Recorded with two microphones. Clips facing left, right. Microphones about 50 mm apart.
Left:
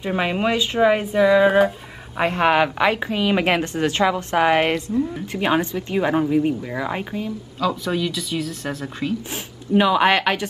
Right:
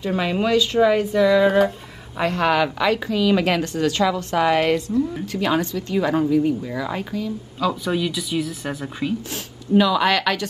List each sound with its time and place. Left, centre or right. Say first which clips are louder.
0.0 s a woman's voice: even; left
2.1 s a woman's voice: left 2 dB; left
7.6 s speech: even; centre
9.8 s a woman's voice: left 1 dB; left